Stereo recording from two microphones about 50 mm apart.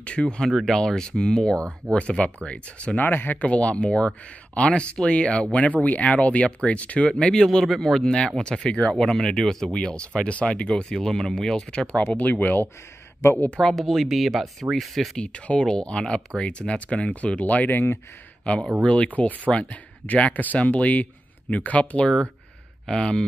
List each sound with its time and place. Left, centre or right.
0.0 s speech: left
0.5 s speech: centre
0.7 s speech: centre
3.0 s speech: left
3.4 s speech: left
7.5 s speech: centre
8.1 s speech: centre
9.7 s speech: centre
12.2 s speech: left
13.6 s speech: centre
15.1 s speech: left
18.4 s speech: centre
22.8 s speech: centre